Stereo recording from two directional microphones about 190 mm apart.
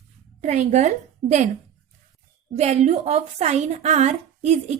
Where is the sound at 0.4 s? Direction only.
35° right (ahead or behind).